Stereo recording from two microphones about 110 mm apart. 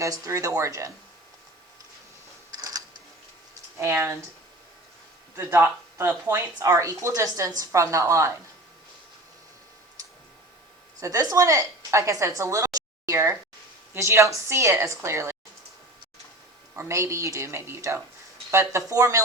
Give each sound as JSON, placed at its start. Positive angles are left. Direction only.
{"t": 0.0, "sound": "a woman's voice", "side_deg": -30}
{"t": 2.5, "sound": "a sound", "side_deg": -35}
{"t": 3.8, "sound": "a woman's voice", "side_deg": -25}
{"t": 5.4, "sound": "a woman's voice", "side_deg": -20}
{"t": 11.0, "sound": "a woman's voice", "side_deg": -30}
{"t": 16.7, "sound": "a woman's voice", "side_deg": -25}